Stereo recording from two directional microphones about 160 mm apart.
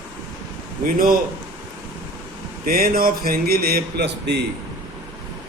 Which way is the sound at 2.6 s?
65° right (ahead or behind).